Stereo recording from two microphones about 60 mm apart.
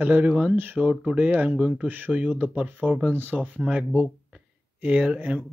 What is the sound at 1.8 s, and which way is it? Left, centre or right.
Speech, right.